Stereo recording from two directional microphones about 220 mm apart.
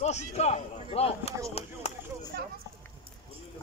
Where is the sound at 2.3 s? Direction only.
40° right (ahead or behind).